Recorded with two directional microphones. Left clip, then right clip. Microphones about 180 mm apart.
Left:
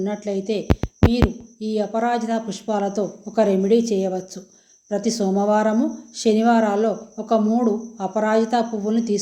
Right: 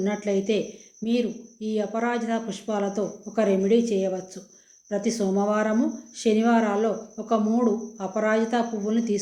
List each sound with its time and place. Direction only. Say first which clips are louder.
0.0 s speech: even; 40° left (ahead or behind)
1.6 s speech: left 5 dB; 40° left (ahead or behind)